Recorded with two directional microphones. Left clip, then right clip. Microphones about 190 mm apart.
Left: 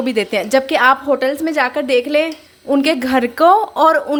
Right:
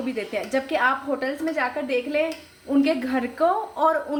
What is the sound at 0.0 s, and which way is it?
A woman's voice, 65° left (ahead or behind).